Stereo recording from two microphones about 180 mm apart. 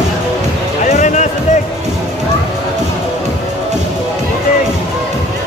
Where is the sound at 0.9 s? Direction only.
45° left (ahead or behind).